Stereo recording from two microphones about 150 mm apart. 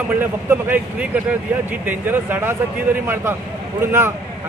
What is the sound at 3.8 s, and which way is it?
Speech, 15° right (ahead or behind).